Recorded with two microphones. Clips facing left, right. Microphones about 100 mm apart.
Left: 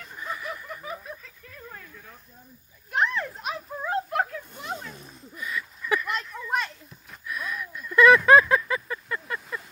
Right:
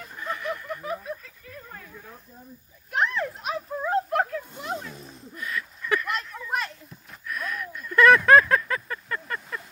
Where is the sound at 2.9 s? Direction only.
Centre (ahead or behind).